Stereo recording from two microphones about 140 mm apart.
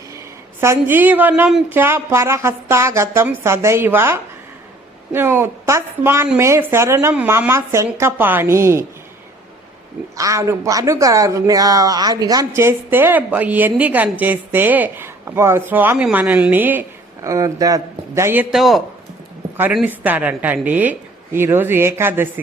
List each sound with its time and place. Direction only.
0.6 s a woman's voice: 15° right (ahead or behind)
1.7 s a woman's voice: 15° right (ahead or behind)
10.2 s a woman's voice: 25° right (ahead or behind)
17.2 s speech: 25° right (ahead or behind)
18.5 s a woman's voice: centre (ahead or behind)